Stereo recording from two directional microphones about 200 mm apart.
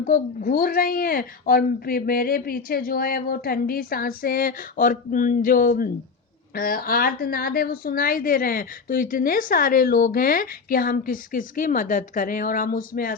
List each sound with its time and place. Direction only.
0.0 s a woman's voice: 45° left (ahead or behind)